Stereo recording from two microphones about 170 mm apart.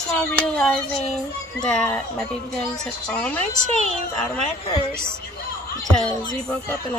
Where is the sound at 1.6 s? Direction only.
5° left (ahead or behind).